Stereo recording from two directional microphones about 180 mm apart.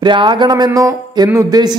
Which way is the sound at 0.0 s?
25° right (ahead or behind).